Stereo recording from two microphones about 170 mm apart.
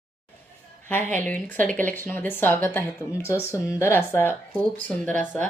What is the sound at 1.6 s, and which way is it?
A woman's voice, 10° left (ahead or behind).